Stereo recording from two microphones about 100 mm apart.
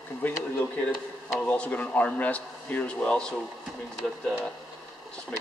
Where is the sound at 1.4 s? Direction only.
15° left (ahead or behind).